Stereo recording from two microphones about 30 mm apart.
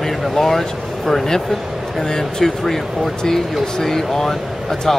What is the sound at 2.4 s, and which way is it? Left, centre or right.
Speech, centre.